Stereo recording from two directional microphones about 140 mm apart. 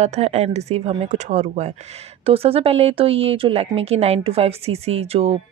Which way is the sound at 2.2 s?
45° right (ahead or behind).